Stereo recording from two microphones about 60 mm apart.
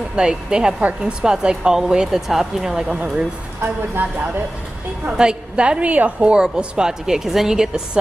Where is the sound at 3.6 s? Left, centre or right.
Right.